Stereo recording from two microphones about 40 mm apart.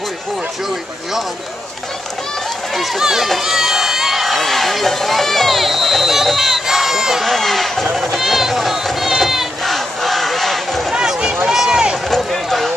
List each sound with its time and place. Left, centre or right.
2.7 s speech: centre
3.3 s run: centre
6.2 s crowd: centre
7.2 s speech: centre
7.9 s a sound: centre
9.7 s battle cry: centre
11.0 s run: centre
12.3 s a sound: centre